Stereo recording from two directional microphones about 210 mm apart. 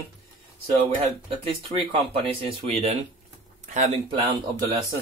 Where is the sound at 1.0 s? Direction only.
25° right (ahead or behind).